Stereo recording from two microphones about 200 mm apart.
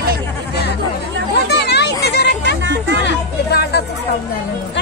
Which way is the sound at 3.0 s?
55° left (ahead or behind).